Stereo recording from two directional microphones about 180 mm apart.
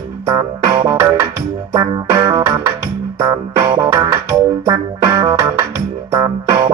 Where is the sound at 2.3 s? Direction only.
20° right (ahead or behind).